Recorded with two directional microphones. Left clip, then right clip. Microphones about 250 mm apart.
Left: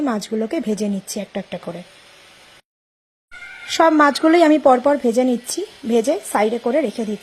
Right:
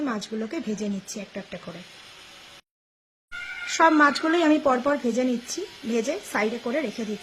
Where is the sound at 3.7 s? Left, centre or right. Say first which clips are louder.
Left 5 dB; left.